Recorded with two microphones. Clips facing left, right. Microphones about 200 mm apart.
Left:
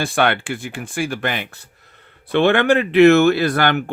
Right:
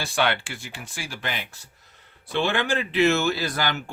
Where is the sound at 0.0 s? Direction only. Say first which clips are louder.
Left 6 dB; 55° left (ahead or behind).